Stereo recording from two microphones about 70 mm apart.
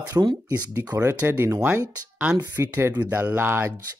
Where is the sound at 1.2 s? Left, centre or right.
Right.